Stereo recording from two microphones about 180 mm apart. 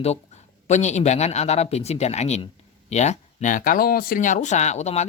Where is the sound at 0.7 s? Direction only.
40° left (ahead or behind).